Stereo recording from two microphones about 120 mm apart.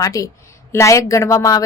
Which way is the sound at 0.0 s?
30° left (ahead or behind).